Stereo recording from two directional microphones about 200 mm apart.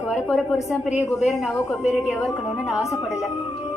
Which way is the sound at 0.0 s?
Centre (ahead or behind).